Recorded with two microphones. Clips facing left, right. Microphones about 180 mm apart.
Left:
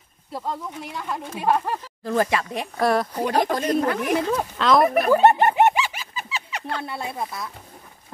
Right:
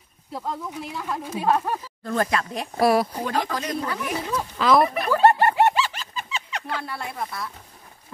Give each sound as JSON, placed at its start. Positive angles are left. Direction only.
{"t": 0.3, "sound": "speech", "side_deg": 0}
{"t": 2.8, "sound": "speech", "side_deg": -10}
{"t": 3.3, "sound": "speech", "side_deg": 50}
{"t": 4.6, "sound": "speech", "side_deg": 0}
{"t": 5.1, "sound": "bird", "side_deg": 20}
{"t": 6.8, "sound": "speech", "side_deg": 20}